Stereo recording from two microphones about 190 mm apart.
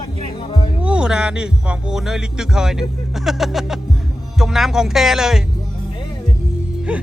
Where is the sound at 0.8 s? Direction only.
5° right (ahead or behind).